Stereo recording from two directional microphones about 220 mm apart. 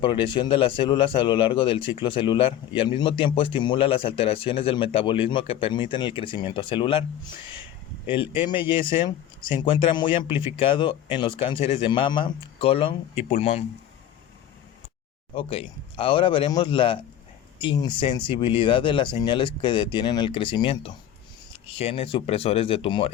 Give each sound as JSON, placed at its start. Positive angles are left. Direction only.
{"t": 0.0, "sound": "speech", "side_deg": 25}
{"t": 8.2, "sound": "speech", "side_deg": 25}
{"t": 15.4, "sound": "speech", "side_deg": 25}